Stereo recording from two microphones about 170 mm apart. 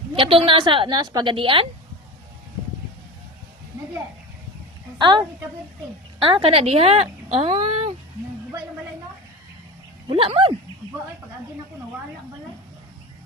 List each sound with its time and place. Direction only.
0.2 s a woman's voice: 30° right (ahead or behind)
4.9 s a woman's voice: 25° right (ahead or behind)
6.2 s a woman's voice: 35° right (ahead or behind)
10.1 s a woman's voice: 30° right (ahead or behind)